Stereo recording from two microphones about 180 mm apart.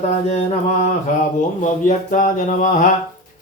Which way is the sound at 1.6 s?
45° left (ahead or behind).